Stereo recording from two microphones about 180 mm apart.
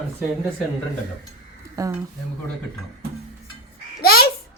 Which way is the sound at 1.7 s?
20° right (ahead or behind).